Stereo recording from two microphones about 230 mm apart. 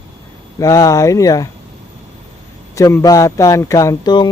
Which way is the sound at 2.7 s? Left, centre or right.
Centre.